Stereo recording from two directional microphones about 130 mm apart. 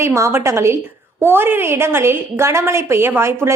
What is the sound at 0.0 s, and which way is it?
A woman's voice, 20° right (ahead or behind).